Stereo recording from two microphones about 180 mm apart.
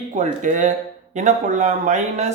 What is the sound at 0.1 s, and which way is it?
Speech, 45° right (ahead or behind).